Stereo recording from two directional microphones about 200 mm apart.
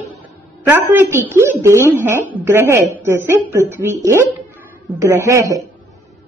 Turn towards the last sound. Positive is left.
turn(degrees=-15)  # may be behind; listen again after turning